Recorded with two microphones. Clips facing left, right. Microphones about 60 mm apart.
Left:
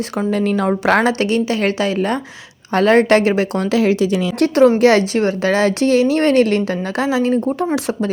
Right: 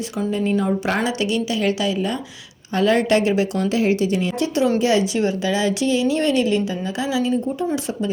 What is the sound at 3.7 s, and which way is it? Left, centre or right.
A woman's voice, left.